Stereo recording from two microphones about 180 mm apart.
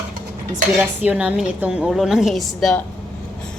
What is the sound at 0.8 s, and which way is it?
A woman's voice, 5° right (ahead or behind).